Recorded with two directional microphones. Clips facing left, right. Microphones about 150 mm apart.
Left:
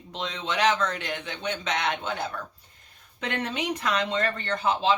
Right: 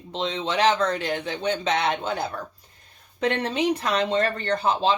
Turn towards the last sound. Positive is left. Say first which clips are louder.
# right 3 dB
turn(degrees=-35)  # may be behind; listen again after turning